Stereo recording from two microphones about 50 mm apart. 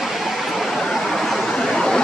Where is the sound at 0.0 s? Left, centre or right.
Centre.